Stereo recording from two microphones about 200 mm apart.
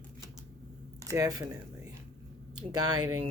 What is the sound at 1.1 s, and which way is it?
Speech, 15° right (ahead or behind).